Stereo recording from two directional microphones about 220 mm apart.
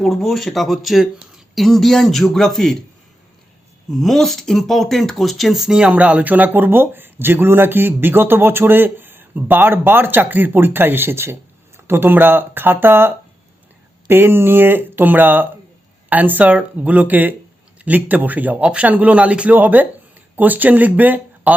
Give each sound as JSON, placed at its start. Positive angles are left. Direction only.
{"t": 0.0, "sound": "a man's voice", "side_deg": 0}
{"t": 3.9, "sound": "speech", "side_deg": 0}